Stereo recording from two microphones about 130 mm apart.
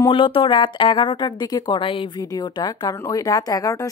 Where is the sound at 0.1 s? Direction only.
40° left (ahead or behind).